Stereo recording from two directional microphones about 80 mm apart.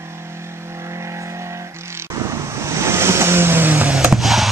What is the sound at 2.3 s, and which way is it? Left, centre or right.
Vehicle, right.